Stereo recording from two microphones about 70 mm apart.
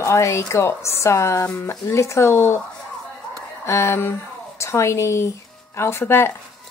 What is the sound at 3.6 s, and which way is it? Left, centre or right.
A woman's voice, left.